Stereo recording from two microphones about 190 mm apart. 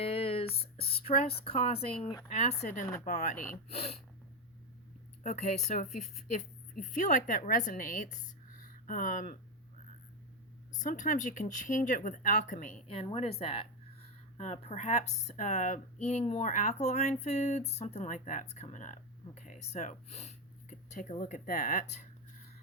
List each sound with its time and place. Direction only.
0.0 s a sound: 30° left (ahead or behind)
2.3 s speech: 35° left (ahead or behind)
5.2 s speech: 35° left (ahead or behind)
10.8 s speech: 40° left (ahead or behind)